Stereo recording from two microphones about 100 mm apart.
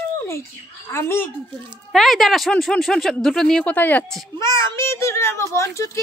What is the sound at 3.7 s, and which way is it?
Speech, 20° left (ahead or behind).